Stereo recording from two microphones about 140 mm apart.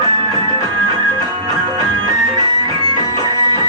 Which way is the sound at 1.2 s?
25° left (ahead or behind).